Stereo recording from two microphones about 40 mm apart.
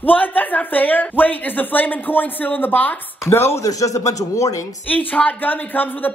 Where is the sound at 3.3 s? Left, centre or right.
Left.